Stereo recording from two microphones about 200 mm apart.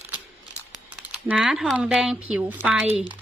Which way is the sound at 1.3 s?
Centre (ahead or behind).